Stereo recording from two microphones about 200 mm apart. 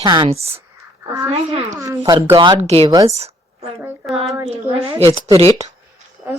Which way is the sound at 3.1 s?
30° right (ahead or behind).